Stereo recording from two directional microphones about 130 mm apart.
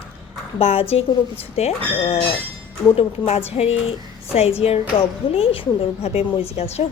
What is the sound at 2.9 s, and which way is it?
A woman's voice, 50° left (ahead or behind).